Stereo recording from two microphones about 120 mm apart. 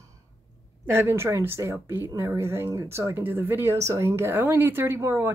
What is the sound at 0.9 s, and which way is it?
Speech, 20° right (ahead or behind).